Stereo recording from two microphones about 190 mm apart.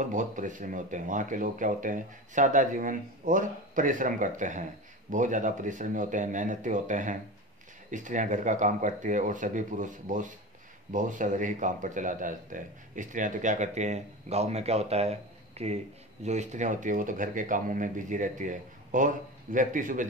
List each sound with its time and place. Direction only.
0.0 s speech: 40° right (ahead or behind)